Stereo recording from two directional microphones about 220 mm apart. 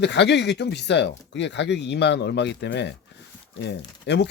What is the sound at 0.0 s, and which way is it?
Speech, 50° left (ahead or behind).